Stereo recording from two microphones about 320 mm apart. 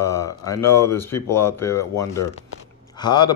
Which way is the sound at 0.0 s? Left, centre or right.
Centre.